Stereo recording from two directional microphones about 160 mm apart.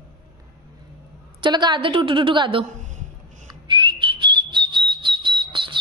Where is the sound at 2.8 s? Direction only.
50° right (ahead or behind).